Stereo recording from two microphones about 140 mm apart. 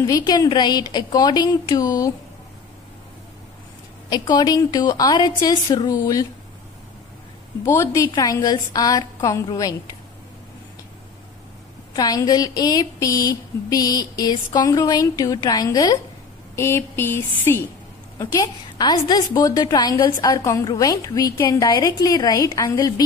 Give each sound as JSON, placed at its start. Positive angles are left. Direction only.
{"t": 0.2, "sound": "a woman's voice", "side_deg": 30}
{"t": 4.1, "sound": "a woman's voice", "side_deg": 30}
{"t": 7.6, "sound": "a woman's voice", "side_deg": 20}
{"t": 11.9, "sound": "a woman's voice", "side_deg": 25}